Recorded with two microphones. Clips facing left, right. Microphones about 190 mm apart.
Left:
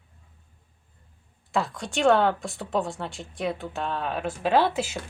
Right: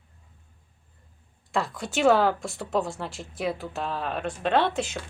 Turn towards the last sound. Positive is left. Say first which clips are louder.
# left 1 dB
turn(degrees=5)  # may be behind; listen again after turning